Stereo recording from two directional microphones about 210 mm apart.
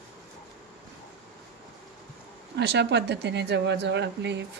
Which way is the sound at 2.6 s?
55° right (ahead or behind).